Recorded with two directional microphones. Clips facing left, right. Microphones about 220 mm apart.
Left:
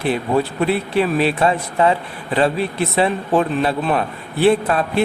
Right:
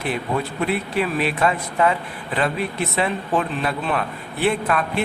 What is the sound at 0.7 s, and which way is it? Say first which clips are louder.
Speech: left 4 dB; 30° left (ahead or behind).